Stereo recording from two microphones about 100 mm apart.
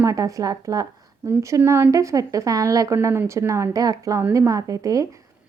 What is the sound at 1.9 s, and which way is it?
A woman's voice, 35° right (ahead or behind).